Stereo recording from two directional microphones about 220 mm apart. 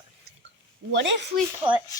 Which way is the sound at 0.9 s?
55° right (ahead or behind).